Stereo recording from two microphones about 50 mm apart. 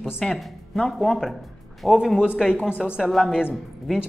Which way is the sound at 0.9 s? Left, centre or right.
Centre.